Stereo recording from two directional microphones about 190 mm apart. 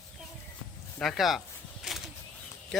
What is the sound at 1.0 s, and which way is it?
Speech, centre (ahead or behind).